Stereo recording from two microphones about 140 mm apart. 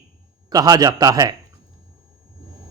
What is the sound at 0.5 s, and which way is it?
Speech, 25° right (ahead or behind).